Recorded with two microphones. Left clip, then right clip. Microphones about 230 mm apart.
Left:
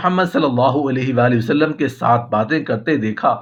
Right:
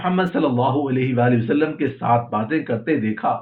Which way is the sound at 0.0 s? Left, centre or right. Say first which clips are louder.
Left 4 dB; left.